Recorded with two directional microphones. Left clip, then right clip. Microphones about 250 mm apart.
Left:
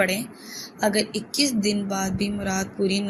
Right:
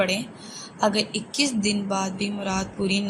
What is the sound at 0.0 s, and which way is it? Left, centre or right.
A woman's voice, centre.